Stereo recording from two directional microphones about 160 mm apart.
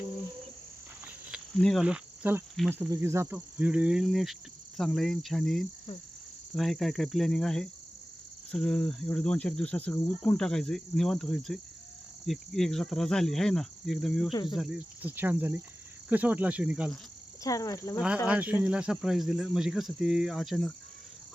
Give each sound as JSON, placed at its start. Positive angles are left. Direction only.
{"t": 1.6, "sound": "insect", "side_deg": 0}
{"t": 2.6, "sound": "cricket", "side_deg": -15}
{"t": 17.4, "sound": "cricket", "side_deg": 20}
{"t": 18.3, "sound": "cricket", "side_deg": -10}